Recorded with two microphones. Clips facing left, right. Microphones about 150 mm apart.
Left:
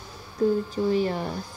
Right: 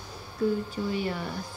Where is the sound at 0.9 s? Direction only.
35° left (ahead or behind).